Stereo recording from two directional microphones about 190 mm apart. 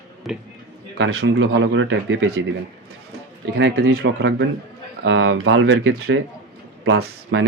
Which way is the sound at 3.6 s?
70° right (ahead or behind).